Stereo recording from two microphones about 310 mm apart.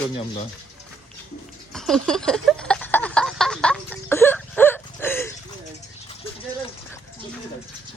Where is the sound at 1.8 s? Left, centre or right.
Centre.